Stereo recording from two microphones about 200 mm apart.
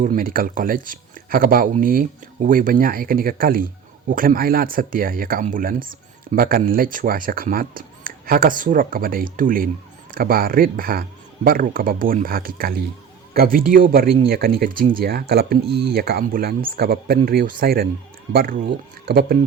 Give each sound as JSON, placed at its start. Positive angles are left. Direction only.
{"t": 0.0, "sound": "speech", "side_deg": -45}